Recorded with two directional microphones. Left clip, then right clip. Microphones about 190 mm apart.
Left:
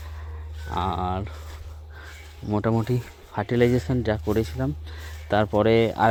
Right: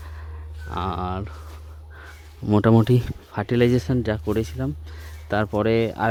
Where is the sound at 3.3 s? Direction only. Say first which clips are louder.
Right 1 dB; 25° right (ahead or behind).